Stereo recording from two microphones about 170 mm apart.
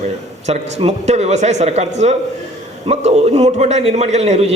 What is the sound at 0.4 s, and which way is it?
A man's voice, 40° right (ahead or behind).